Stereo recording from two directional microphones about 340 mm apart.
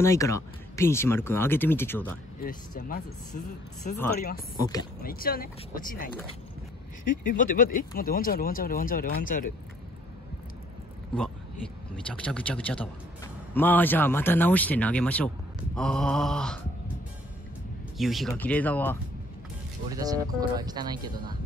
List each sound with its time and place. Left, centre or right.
0.0 s speech: centre
2.4 s speech: left
5.0 s speech: left
12.1 s a man's voice: centre
17.9 s a man's voice: centre
19.9 s speech: centre